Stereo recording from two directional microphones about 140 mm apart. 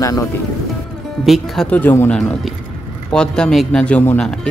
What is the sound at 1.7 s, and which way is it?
Speech, 15° left (ahead or behind).